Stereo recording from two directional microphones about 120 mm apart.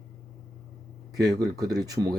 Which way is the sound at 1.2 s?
30° right (ahead or behind).